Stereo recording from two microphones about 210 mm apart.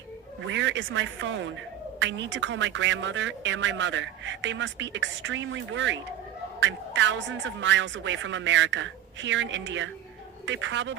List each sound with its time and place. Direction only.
0.4 s a woman's voice: 60° right (ahead or behind)